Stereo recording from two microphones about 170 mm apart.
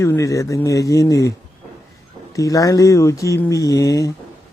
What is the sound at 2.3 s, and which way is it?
Speech, 20° left (ahead or behind).